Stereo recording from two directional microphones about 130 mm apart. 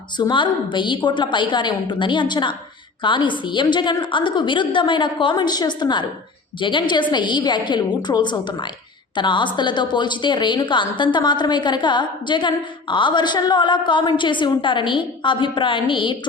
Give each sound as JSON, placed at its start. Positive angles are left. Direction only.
{"t": 0.2, "sound": "a woman's voice", "side_deg": 35}